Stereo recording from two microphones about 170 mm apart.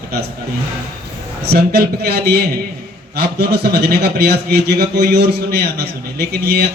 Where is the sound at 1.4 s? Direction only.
70° right (ahead or behind).